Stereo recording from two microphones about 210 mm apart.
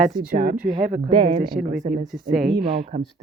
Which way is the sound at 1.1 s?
25° right (ahead or behind).